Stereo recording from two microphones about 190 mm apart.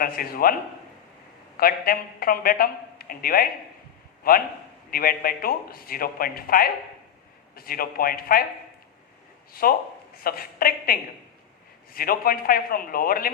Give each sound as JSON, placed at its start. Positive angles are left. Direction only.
{"t": 0.0, "sound": "a man's voice", "side_deg": 50}
{"t": 1.5, "sound": "a man's voice", "side_deg": 50}
{"t": 9.5, "sound": "a man's voice", "side_deg": 50}
{"t": 11.9, "sound": "a man's voice", "side_deg": 50}